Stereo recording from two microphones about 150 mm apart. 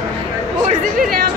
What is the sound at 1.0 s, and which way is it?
Speech, 70° right (ahead or behind).